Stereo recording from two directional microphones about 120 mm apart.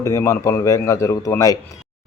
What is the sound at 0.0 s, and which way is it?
Speech, 25° left (ahead or behind).